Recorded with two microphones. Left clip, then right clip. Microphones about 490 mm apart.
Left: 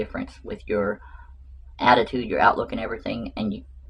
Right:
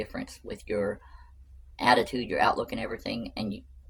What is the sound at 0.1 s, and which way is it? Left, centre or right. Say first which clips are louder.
Speech: left 5 dB; right.